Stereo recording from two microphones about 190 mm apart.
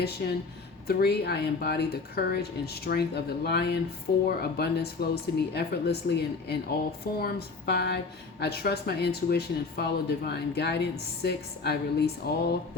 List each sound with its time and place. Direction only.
0.2 s speech: 55° left (ahead or behind)